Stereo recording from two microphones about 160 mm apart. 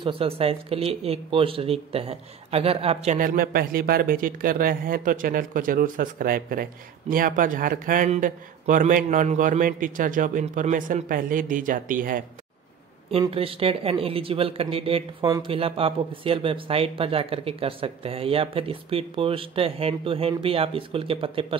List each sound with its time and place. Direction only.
0.0 s speech: 35° right (ahead or behind)
3.2 s speech: 65° right (ahead or behind)
13.3 s speech: 35° right (ahead or behind)